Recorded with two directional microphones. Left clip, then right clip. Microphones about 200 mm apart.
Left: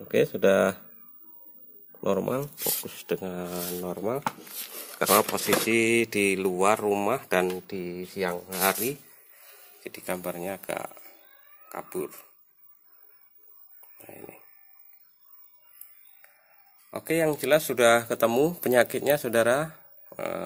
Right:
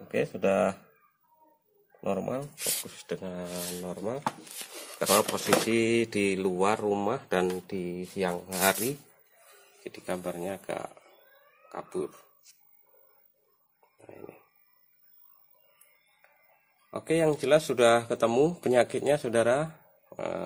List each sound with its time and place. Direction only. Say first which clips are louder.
0.1 s speech: left 5 dB; 40° left (ahead or behind)
2.0 s speech: left 4 dB; 35° left (ahead or behind); by 7.5 s centre (ahead or behind)
7.5 s speech: left 1 dB; 10° right (ahead or behind)
9.8 s speech: left 2 dB; 5° left (ahead or behind)
14.0 s speech: left 1 dB; 5° left (ahead or behind)
16.9 s speech: even; centre (ahead or behind)